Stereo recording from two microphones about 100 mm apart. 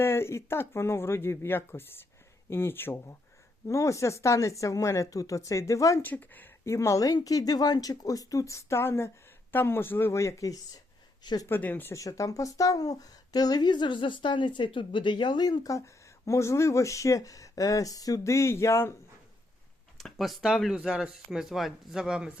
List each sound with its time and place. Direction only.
0.0 s speech: 25° left (ahead or behind)
6.0 s speech: 15° left (ahead or behind)
6.7 s speech: 35° left (ahead or behind)
11.2 s speech: 45° left (ahead or behind)
11.4 s speech: 20° left (ahead or behind)
11.9 s speech: 35° left (ahead or behind)
20.0 s speech: centre (ahead or behind)